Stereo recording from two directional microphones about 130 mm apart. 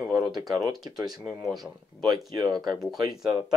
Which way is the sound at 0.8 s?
30° right (ahead or behind).